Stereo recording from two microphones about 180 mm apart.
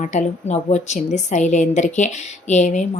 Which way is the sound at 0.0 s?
40° left (ahead or behind).